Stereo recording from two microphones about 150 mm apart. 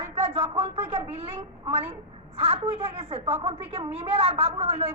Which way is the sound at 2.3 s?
40° right (ahead or behind).